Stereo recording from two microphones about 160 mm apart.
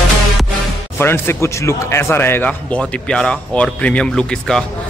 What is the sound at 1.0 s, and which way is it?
A man's voice, 15° left (ahead or behind).